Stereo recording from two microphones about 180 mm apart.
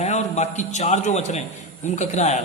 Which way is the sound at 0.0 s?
40° left (ahead or behind).